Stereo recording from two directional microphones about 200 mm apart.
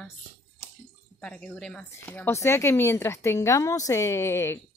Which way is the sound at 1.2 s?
5° left (ahead or behind).